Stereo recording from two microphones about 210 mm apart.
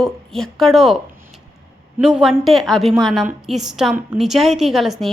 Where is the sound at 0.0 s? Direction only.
Centre (ahead or behind).